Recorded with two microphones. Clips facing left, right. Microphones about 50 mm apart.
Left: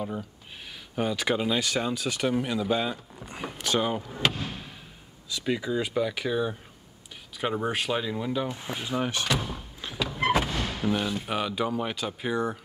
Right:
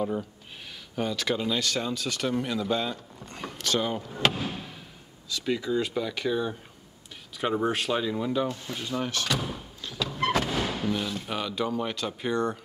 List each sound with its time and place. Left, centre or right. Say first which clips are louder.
0.0 s speech: right 4 dB; centre
0.9 s speech: left 2 dB; centre
4.0 s speech: right 1 dB; centre
5.3 s speech: right 1 dB; centre
8.5 s speech: even; left
9.9 s vehicle: left 1 dB; centre
10.5 s music: right 2 dB; centre
10.9 s speech: left 2 dB; centre